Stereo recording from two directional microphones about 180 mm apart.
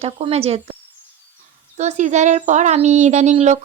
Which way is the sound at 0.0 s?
35° right (ahead or behind).